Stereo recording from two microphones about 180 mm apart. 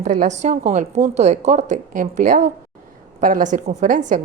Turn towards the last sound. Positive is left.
turn(degrees=-45)  # may be behind; listen again after turning